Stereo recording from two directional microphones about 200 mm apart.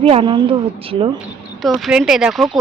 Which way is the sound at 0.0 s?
30° right (ahead or behind).